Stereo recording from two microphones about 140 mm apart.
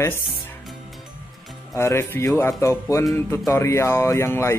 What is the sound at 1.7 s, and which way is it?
Speech, 20° left (ahead or behind).